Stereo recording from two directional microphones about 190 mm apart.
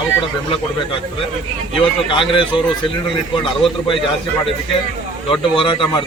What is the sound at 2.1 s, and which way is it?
Speech, 25° left (ahead or behind).